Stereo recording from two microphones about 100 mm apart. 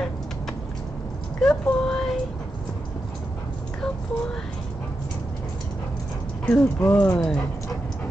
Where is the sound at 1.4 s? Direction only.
5° left (ahead or behind).